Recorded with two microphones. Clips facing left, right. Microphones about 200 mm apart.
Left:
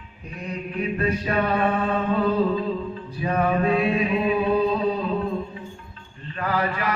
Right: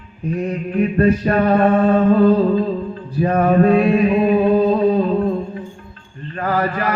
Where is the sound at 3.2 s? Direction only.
50° right (ahead or behind).